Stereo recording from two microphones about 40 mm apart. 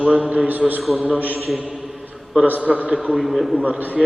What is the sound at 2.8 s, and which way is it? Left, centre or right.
Speech, right.